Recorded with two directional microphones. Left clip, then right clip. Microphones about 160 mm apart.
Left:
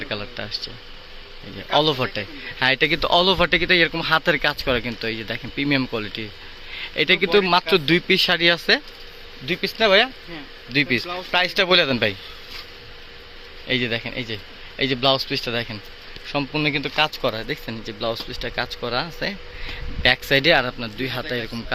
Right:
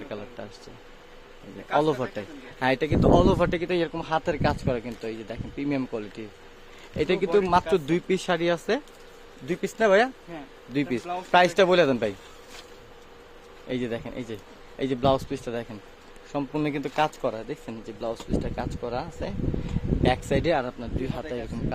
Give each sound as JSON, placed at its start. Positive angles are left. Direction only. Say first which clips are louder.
{"t": 1.7, "sound": "speech", "louder": "left 5 dB", "side_deg": -5}
{"t": 9.5, "sound": "speech", "louder": "left 4 dB", "side_deg": -25}
{"t": 13.7, "sound": "speech", "louder": "left 8 dB", "side_deg": -15}
{"t": 15.4, "sound": "speech", "louder": "left 7 dB", "side_deg": 0}